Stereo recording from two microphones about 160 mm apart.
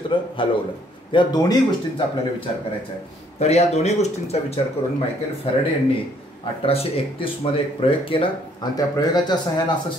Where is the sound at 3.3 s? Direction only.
40° left (ahead or behind).